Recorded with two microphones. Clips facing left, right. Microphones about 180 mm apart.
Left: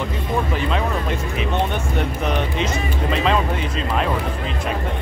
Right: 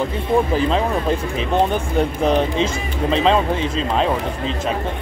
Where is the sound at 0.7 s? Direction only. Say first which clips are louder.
Right 4 dB; 30° right (ahead or behind).